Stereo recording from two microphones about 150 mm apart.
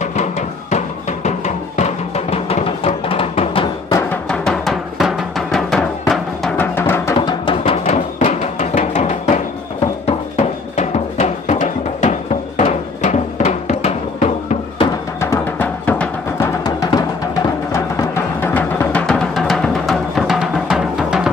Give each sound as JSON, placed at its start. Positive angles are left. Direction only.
{"t": 0.0, "sound": "music", "side_deg": 50}
{"t": 4.3, "sound": "music", "side_deg": 0}
{"t": 6.6, "sound": "music", "side_deg": 15}
{"t": 7.2, "sound": "music", "side_deg": 35}
{"t": 15.1, "sound": "music", "side_deg": 15}